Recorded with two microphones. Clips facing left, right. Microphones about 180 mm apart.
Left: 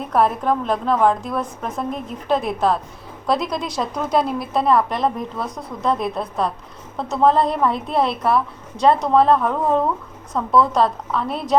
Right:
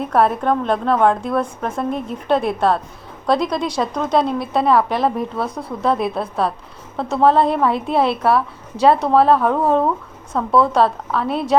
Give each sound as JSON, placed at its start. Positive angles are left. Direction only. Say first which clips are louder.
{"t": 0.0, "sound": "a woman's voice", "louder": "right 2 dB", "side_deg": 0}
{"t": 5.5, "sound": "speech", "louder": "right 4 dB", "side_deg": -30}
{"t": 5.8, "sound": "a woman's voice", "louder": "right 2 dB", "side_deg": -5}